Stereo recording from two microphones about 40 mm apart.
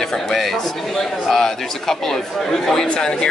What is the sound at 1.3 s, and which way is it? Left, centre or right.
Speech, centre.